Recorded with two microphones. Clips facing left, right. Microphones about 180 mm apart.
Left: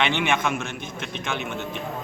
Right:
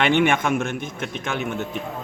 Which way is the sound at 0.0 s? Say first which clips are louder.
Right 4 dB; 50° right (ahead or behind).